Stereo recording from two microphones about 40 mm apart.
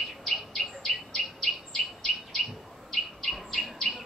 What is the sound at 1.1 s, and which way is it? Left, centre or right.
Bird, centre.